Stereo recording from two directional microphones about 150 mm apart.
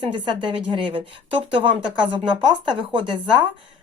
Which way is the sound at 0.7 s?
35° right (ahead or behind).